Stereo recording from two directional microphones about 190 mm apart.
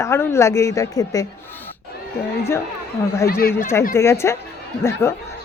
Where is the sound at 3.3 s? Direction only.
50° left (ahead or behind).